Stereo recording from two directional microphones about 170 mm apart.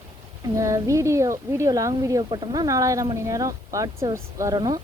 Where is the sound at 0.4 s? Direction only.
20° right (ahead or behind).